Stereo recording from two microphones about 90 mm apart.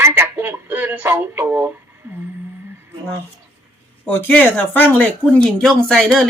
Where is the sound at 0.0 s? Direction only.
25° right (ahead or behind).